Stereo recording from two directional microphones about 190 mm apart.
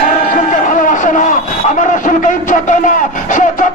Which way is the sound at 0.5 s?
45° left (ahead or behind).